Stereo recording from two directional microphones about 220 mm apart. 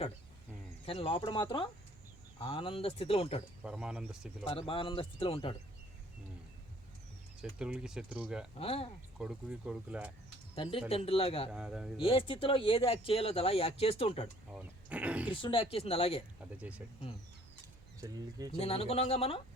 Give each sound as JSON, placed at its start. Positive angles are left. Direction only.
{"t": 0.9, "sound": "speech", "side_deg": 25}
{"t": 3.6, "sound": "speech", "side_deg": -5}
{"t": 4.4, "sound": "speech", "side_deg": 25}
{"t": 7.6, "sound": "speech", "side_deg": -5}
{"t": 8.5, "sound": "speech", "side_deg": 25}
{"t": 9.1, "sound": "speech", "side_deg": -5}
{"t": 10.5, "sound": "speech", "side_deg": 25}
{"t": 11.5, "sound": "speech", "side_deg": -5}
{"t": 11.9, "sound": "speech", "side_deg": 25}
{"t": 14.5, "sound": "speech", "side_deg": -5}
{"t": 15.3, "sound": "speech", "side_deg": 20}
{"t": 16.6, "sound": "speech", "side_deg": -5}
{"t": 18.0, "sound": "speech", "side_deg": -15}
{"t": 18.5, "sound": "speech", "side_deg": 25}